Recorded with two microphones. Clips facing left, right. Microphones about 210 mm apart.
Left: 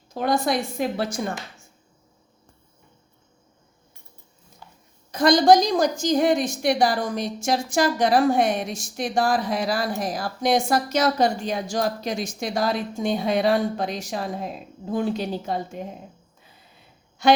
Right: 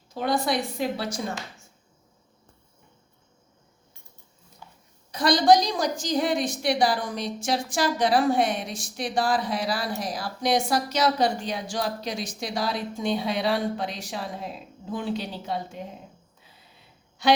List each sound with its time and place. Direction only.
0.1 s a woman's voice: 45° left (ahead or behind)
5.1 s a woman's voice: 45° left (ahead or behind)